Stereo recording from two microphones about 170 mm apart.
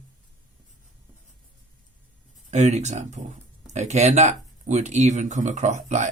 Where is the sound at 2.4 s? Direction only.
40° right (ahead or behind).